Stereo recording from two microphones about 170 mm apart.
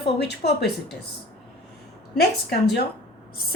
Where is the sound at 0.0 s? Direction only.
75° left (ahead or behind).